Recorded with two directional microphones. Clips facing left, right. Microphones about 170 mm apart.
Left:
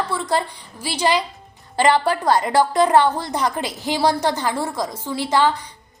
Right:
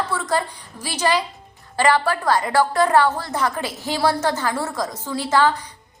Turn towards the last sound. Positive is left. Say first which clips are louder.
# even
turn(degrees=15)  # may be behind; listen again after turning